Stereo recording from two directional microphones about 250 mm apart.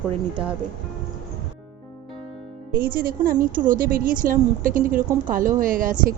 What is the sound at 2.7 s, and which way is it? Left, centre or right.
A woman's voice, right.